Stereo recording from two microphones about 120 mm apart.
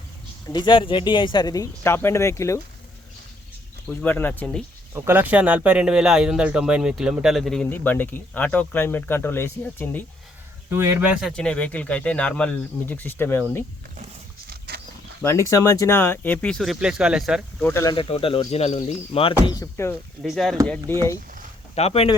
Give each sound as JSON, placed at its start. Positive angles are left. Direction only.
{"t": 0.5, "sound": "speech", "side_deg": 40}
{"t": 3.8, "sound": "speech", "side_deg": 15}
{"t": 4.9, "sound": "speech", "side_deg": -15}
{"t": 7.7, "sound": "speech", "side_deg": 15}
{"t": 10.7, "sound": "speech", "side_deg": -25}
{"t": 11.0, "sound": "speech", "side_deg": -5}
{"t": 15.2, "sound": "speech", "side_deg": 25}
{"t": 17.9, "sound": "speech", "side_deg": 50}
{"t": 19.1, "sound": "speech", "side_deg": 50}
{"t": 19.5, "sound": "speech", "side_deg": 20}
{"t": 20.2, "sound": "speech", "side_deg": 0}
{"t": 20.9, "sound": "speech", "side_deg": 20}
{"t": 21.8, "sound": "speech", "side_deg": 55}